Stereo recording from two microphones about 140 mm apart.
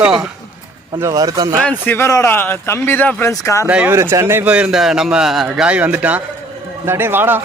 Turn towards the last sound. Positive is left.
turn(degrees=-15)  # may be behind; listen again after turning